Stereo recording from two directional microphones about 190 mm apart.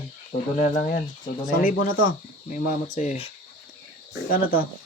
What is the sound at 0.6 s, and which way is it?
Speech, 45° left (ahead or behind).